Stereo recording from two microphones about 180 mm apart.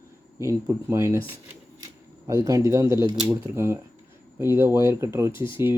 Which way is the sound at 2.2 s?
20° right (ahead or behind).